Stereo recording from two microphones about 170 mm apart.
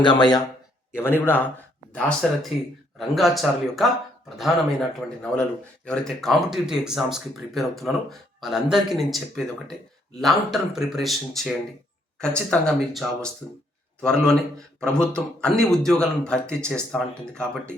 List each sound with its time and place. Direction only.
0.0 s speech: 25° left (ahead or behind)
0.9 s speech: 15° left (ahead or behind)